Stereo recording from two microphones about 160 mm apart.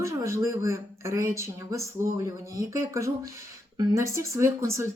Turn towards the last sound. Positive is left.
turn(degrees=-15)  # may be behind; listen again after turning